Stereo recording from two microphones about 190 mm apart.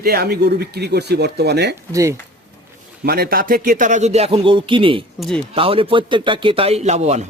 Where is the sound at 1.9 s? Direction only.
15° right (ahead or behind).